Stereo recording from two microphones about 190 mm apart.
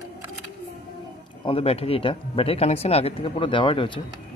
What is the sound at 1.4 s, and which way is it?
Speech, 30° left (ahead or behind).